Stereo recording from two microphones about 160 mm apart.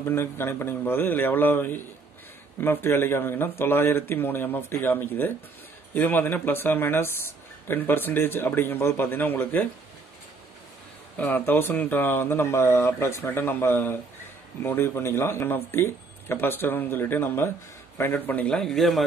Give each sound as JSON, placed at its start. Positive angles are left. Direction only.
{"t": 0.0, "sound": "speech", "side_deg": 15}
{"t": 11.1, "sound": "speech", "side_deg": 10}